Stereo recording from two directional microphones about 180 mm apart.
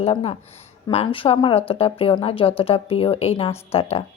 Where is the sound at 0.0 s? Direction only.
35° left (ahead or behind).